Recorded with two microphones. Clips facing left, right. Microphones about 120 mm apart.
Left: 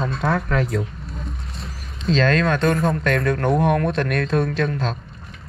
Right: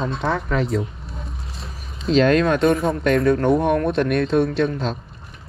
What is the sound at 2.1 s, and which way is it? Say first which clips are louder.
Speech: right 3 dB; 15° right (ahead or behind).